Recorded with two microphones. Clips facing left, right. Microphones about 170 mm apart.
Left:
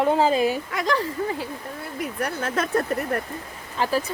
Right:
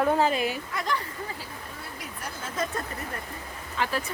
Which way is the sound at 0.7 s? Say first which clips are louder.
Left 6 dB; 90° left.